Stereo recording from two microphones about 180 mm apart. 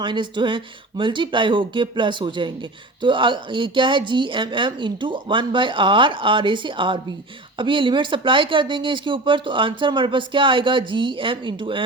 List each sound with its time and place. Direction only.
0.0 s speech: 25° right (ahead or behind)